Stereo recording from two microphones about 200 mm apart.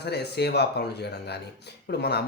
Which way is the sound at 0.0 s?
55° left (ahead or behind).